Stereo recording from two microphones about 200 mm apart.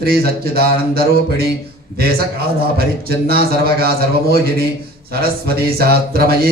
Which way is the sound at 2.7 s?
50° right (ahead or behind).